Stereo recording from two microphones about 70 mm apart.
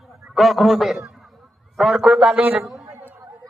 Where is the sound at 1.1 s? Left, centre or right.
Centre.